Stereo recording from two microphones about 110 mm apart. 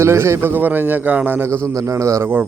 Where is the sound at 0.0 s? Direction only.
25° right (ahead or behind).